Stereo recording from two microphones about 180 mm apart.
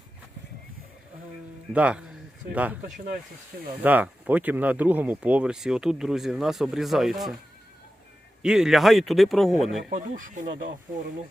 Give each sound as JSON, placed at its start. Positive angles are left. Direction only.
{"t": 1.7, "sound": "speech", "side_deg": -5}
{"t": 3.8, "sound": "speech", "side_deg": -10}
{"t": 8.4, "sound": "speech", "side_deg": -5}
{"t": 9.9, "sound": "speech", "side_deg": -45}